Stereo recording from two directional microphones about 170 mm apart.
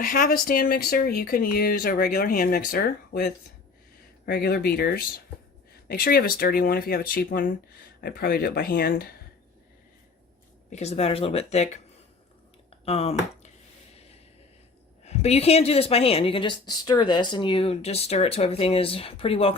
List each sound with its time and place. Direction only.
0.1 s speech: 55° left (ahead or behind)
4.3 s speech: 60° left (ahead or behind)
10.7 s speech: 40° left (ahead or behind)
12.8 s speech: 35° left (ahead or behind)
15.0 s speech: 40° left (ahead or behind)